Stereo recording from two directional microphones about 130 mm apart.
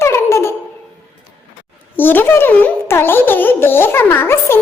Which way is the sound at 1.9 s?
15° left (ahead or behind).